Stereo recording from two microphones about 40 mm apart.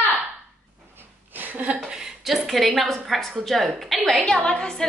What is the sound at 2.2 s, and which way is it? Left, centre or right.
A woman's voice, centre.